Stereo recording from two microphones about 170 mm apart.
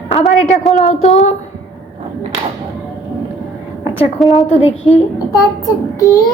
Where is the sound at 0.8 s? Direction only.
40° left (ahead or behind).